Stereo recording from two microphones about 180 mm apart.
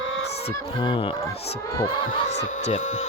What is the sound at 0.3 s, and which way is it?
Fowl, 35° left (ahead or behind).